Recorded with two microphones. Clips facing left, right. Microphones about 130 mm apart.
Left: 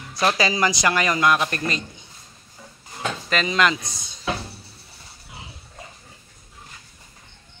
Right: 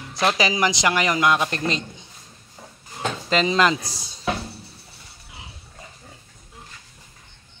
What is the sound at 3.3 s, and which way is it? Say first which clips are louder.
Speech: right 2 dB; 25° right (ahead or behind).